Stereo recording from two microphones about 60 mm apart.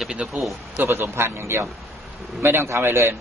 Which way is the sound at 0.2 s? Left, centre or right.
Centre.